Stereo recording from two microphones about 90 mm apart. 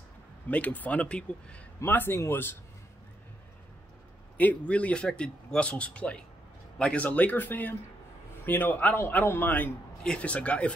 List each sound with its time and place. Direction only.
0.5 s speech: 20° left (ahead or behind)
1.8 s speech: 25° left (ahead or behind)
4.4 s speech: 15° left (ahead or behind)
10.0 s speech: 15° left (ahead or behind)